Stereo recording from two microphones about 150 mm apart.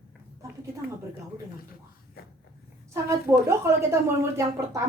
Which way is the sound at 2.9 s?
15° right (ahead or behind).